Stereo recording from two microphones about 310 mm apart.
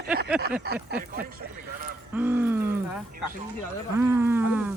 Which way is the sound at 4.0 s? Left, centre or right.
Centre.